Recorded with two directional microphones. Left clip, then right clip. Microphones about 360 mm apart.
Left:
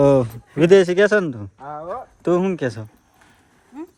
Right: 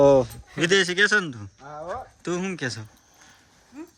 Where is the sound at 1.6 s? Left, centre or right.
Left.